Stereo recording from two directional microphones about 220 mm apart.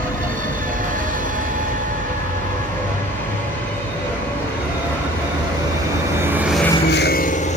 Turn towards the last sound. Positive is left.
turn(degrees=45)  # may be behind; listen again after turning